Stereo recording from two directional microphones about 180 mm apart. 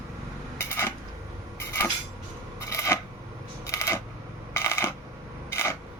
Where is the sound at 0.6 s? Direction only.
15° left (ahead or behind).